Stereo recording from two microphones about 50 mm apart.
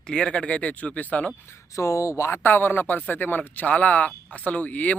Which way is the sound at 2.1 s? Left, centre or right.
Left.